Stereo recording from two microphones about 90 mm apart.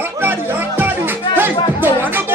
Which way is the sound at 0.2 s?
20° right (ahead or behind).